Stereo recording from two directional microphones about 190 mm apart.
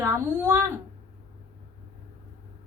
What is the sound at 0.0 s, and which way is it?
Speech, 15° right (ahead or behind).